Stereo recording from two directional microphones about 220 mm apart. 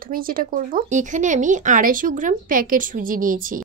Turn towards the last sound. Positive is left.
turn(degrees=-40)  # may be behind; listen again after turning